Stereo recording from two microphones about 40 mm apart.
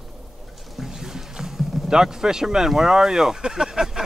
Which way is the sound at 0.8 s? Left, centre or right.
Centre.